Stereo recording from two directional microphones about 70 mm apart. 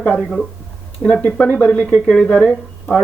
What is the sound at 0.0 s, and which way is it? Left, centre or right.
Speech, centre.